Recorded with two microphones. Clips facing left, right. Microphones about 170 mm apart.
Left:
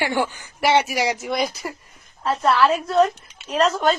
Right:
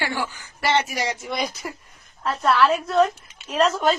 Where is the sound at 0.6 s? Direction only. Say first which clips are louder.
Left 4 dB; 10° left (ahead or behind).